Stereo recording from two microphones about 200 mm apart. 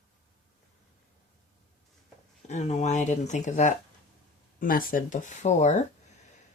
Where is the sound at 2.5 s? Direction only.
35° left (ahead or behind).